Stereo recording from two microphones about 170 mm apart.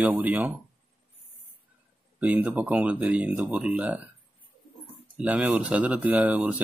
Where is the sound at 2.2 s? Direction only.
10° right (ahead or behind).